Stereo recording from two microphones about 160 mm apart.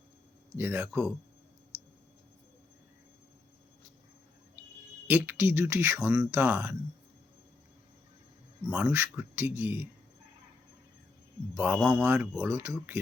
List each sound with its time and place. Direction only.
0.5 s speech: 15° right (ahead or behind)
5.0 s speech: 10° right (ahead or behind)
8.7 s speech: 15° right (ahead or behind)
11.5 s speech: 10° right (ahead or behind)